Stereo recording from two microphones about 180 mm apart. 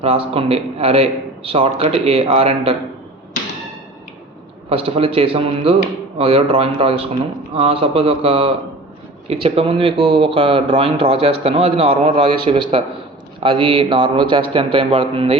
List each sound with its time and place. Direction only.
0.0 s speech: 35° right (ahead or behind)
4.7 s a man's voice: 30° right (ahead or behind)